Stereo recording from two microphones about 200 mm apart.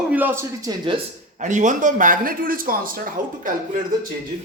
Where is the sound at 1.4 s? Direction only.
40° right (ahead or behind).